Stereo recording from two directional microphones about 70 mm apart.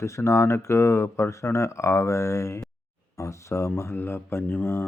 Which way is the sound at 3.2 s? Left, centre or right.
Left.